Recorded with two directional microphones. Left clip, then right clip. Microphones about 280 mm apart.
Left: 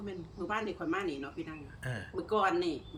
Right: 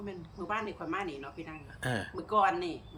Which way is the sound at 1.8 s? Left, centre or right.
Right.